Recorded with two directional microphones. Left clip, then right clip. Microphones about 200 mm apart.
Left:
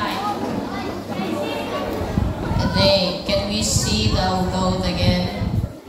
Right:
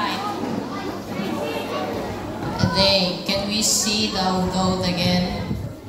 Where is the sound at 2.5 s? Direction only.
55° right (ahead or behind).